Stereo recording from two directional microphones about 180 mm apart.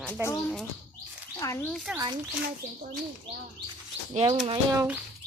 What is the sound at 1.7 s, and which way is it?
Speech, centre (ahead or behind).